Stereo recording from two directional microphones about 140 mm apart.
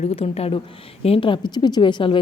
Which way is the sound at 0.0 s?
45° left (ahead or behind).